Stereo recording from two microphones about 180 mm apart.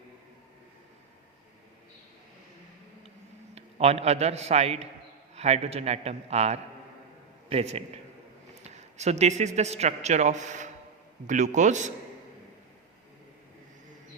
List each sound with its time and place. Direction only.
3.5 s a man's voice: 35° right (ahead or behind)